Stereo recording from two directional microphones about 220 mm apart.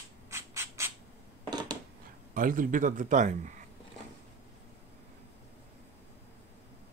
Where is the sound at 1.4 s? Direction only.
20° right (ahead or behind).